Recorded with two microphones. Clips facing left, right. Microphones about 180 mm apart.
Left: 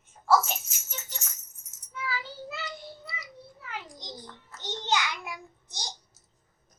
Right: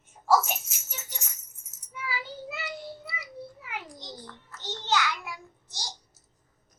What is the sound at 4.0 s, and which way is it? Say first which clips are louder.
Child singing: even; 15° left (ahead or behind).